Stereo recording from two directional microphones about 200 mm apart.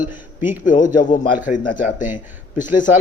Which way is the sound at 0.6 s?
40° left (ahead or behind).